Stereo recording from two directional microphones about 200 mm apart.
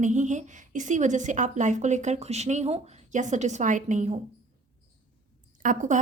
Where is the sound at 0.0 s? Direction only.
35° right (ahead or behind).